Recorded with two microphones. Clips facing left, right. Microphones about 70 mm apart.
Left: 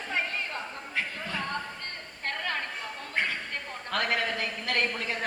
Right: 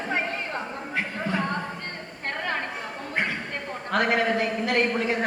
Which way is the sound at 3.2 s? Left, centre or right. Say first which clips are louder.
Right 2 dB; right.